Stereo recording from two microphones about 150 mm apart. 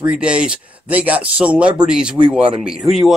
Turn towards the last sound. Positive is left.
turn(degrees=0)  # may be behind; listen again after turning